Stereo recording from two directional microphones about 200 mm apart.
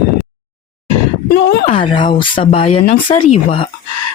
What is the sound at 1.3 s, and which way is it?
Speech, 55° left (ahead or behind).